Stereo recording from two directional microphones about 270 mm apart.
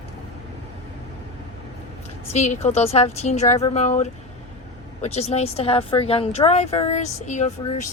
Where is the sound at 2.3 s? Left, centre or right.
Left.